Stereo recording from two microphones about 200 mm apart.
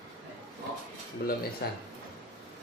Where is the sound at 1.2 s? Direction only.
50° left (ahead or behind).